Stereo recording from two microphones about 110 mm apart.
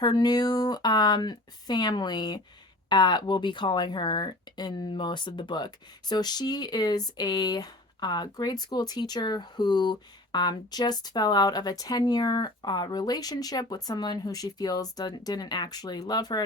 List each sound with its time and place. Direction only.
0.0 s speech: 40° left (ahead or behind)